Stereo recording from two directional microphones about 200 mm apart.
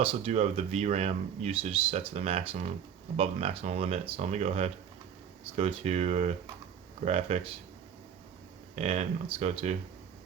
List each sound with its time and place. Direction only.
0.0 s speech: 30° right (ahead or behind)
8.7 s speech: 35° right (ahead or behind)